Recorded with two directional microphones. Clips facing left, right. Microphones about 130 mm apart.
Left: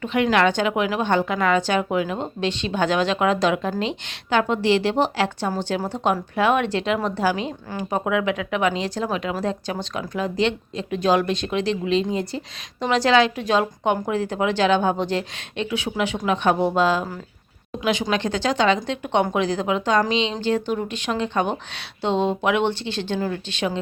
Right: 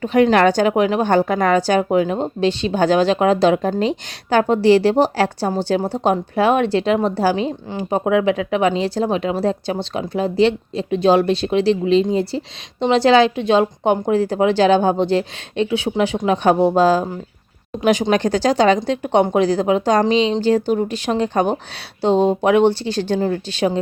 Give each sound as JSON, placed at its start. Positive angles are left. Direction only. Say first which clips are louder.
{"t": 0.0, "sound": "speech", "louder": "right 6 dB", "side_deg": -40}
{"t": 18.1, "sound": "speech", "louder": "right 6 dB", "side_deg": -40}